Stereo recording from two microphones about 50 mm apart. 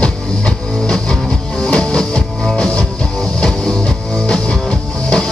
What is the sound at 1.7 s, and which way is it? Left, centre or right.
Music, centre.